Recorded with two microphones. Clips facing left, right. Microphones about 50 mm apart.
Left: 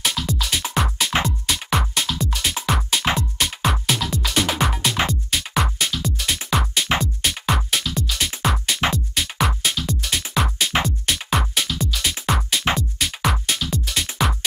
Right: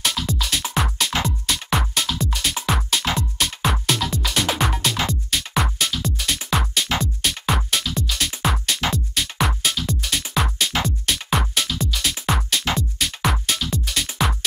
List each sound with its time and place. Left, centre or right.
0.0 s music: centre